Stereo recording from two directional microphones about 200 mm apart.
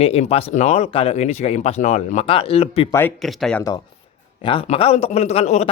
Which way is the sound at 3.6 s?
15° left (ahead or behind).